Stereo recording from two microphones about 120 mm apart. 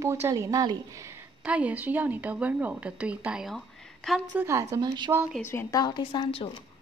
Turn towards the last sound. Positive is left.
turn(degrees=40)  # may be behind; listen again after turning